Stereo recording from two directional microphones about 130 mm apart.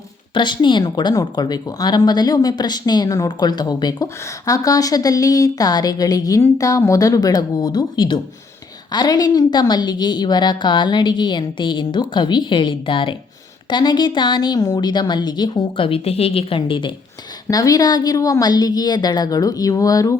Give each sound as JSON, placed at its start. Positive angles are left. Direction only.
{"t": 0.3, "sound": "a woman's voice", "side_deg": 35}
{"t": 17.5, "sound": "a woman's voice", "side_deg": 30}